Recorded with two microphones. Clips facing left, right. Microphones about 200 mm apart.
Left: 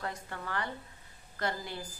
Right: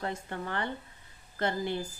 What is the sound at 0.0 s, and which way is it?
A woman's voice, 25° right (ahead or behind).